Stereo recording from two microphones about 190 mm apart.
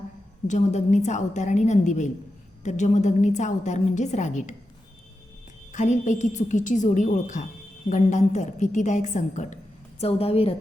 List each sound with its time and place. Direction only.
0.4 s a woman's voice: 40° left (ahead or behind)
5.7 s a woman's voice: 40° left (ahead or behind)